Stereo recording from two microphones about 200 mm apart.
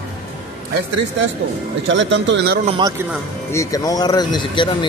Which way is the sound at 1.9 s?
65° right (ahead or behind).